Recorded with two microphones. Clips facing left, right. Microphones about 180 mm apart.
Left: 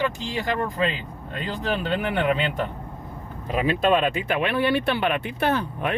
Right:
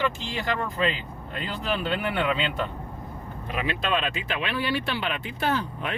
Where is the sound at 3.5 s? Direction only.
35° left (ahead or behind).